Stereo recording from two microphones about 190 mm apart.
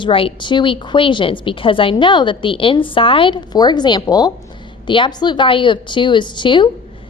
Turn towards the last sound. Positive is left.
turn(degrees=25)  # may be behind; listen again after turning